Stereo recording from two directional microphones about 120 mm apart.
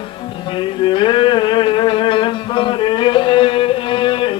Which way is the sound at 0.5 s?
45° left (ahead or behind).